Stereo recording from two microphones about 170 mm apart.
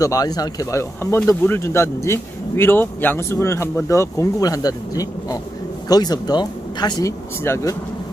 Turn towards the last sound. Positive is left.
turn(degrees=15)  # may be behind; listen again after turning